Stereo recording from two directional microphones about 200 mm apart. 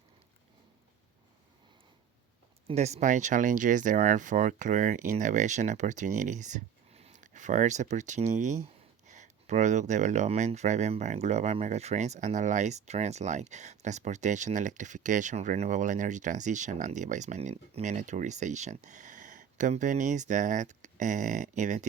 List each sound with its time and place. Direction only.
2.6 s speech: 35° right (ahead or behind)